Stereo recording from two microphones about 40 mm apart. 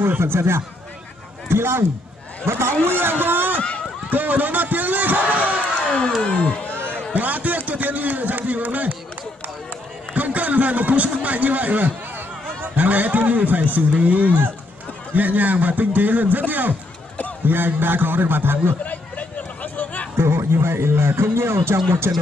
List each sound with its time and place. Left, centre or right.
0.0 s a man's voice: right
5.9 s a sound: left
6.2 s speech: left
7.2 s a man's voice: right
10.1 s a man's voice: right
18.9 s a sound: left
20.2 s speech: right